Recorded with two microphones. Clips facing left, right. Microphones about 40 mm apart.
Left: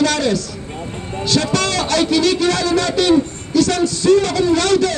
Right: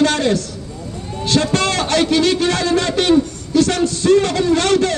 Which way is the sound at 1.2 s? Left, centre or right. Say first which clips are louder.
Right 1 dB; right.